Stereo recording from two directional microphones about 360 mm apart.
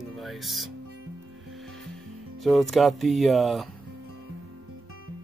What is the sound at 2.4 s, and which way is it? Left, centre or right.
Speech, centre.